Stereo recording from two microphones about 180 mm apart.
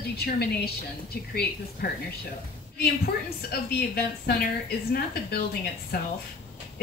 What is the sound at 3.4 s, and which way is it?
Speech, 60° left (ahead or behind).